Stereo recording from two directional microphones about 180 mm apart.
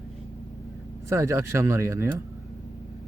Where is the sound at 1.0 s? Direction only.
15° right (ahead or behind).